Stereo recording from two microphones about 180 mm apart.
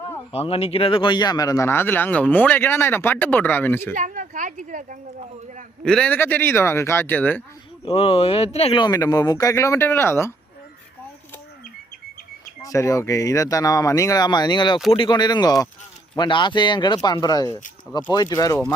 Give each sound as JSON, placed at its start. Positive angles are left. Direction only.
{"t": 0.3, "sound": "speech", "side_deg": 30}
{"t": 3.9, "sound": "speech", "side_deg": -45}
{"t": 5.8, "sound": "speech", "side_deg": 5}
{"t": 7.9, "sound": "speech", "side_deg": 30}
{"t": 12.6, "sound": "speech", "side_deg": 15}